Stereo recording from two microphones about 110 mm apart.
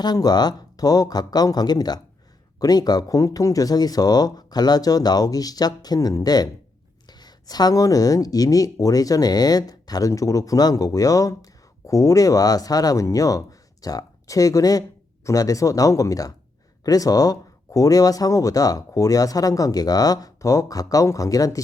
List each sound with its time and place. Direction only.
0.0 s speech: 40° left (ahead or behind)